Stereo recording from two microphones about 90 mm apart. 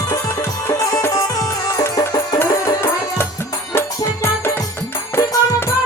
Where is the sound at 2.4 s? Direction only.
30° left (ahead or behind).